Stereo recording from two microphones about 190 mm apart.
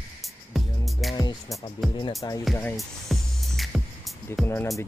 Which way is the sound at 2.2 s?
25° left (ahead or behind).